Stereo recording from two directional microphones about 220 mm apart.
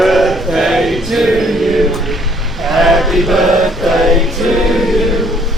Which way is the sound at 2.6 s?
Centre (ahead or behind).